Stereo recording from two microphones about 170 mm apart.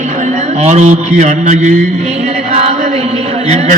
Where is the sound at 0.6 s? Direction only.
45° right (ahead or behind).